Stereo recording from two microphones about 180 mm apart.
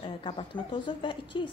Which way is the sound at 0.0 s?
30° left (ahead or behind).